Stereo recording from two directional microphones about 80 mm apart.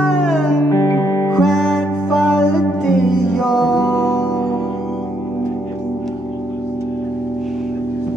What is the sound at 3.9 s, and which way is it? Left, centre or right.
Music, left.